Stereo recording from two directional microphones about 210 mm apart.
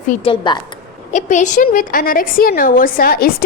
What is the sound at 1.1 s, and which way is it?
A woman's voice, 35° left (ahead or behind).